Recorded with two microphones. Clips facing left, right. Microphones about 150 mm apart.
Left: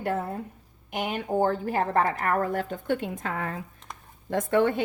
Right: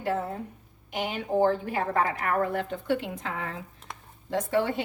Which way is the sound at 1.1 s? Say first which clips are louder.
Right 1 dB; 45° left (ahead or behind).